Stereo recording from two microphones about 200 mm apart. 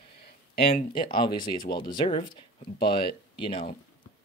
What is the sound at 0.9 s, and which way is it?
Speech, 25° left (ahead or behind).